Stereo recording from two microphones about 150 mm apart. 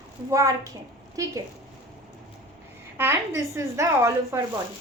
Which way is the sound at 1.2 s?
20° right (ahead or behind).